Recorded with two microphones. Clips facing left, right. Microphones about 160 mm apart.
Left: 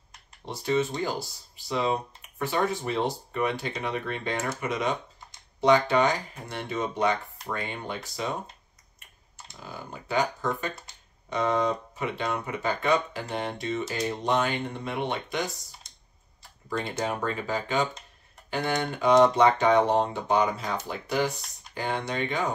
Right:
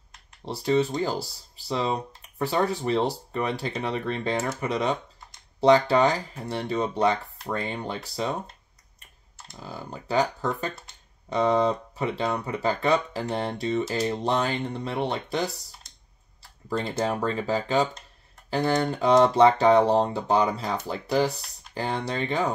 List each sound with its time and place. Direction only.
0.5 s speech: 35° right (ahead or behind)
2.3 s speech: 35° right (ahead or behind)
9.6 s speech: 35° right (ahead or behind)
17.0 s speech: 35° right (ahead or behind)